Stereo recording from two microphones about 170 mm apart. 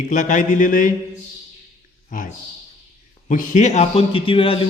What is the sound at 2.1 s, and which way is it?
Speech, 55° left (ahead or behind).